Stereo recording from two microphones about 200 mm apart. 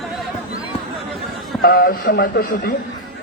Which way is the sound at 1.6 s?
50° left (ahead or behind).